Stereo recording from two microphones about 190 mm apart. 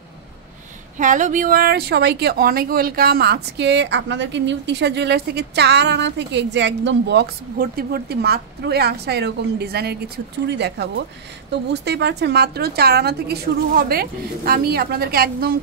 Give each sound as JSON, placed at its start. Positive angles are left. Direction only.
{"t": 0.9, "sound": "speech", "side_deg": -40}